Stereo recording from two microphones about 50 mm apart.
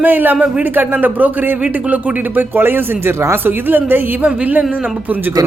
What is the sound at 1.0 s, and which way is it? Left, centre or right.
Speech, right.